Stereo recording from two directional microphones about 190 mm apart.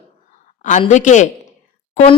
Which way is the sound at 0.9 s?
40° left (ahead or behind).